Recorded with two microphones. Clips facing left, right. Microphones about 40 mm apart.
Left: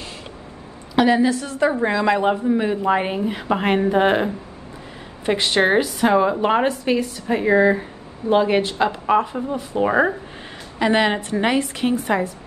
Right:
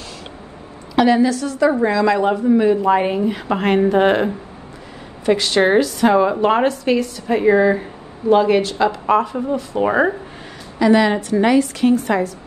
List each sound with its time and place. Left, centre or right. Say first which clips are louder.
0.9 s a woman's voice: right 2 dB; centre
1.3 s a woman's voice: right 3 dB; left
2.4 s a woman's voice: right 5 dB; centre
5.2 s a woman's voice: right 3 dB; left
5.9 s a woman's voice: right 2 dB; centre
7.2 s speech: right 2 dB; centre
8.3 s a woman's voice: right 3 dB; centre
9.5 s speech: right 3 dB; centre
10.8 s a woman's voice: right 4 dB; left